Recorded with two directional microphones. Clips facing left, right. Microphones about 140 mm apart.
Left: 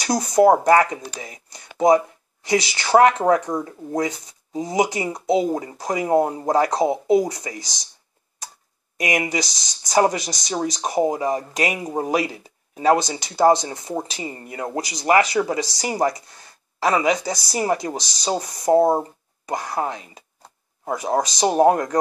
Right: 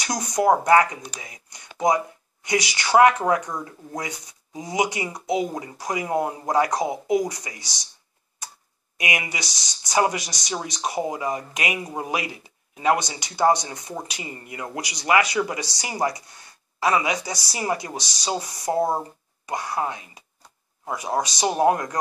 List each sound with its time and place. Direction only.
0.0 s speech: 30° left (ahead or behind)
1.2 s a sound: 30° left (ahead or behind)
2.4 s speech: 30° left (ahead or behind)
8.9 s speech: 35° left (ahead or behind)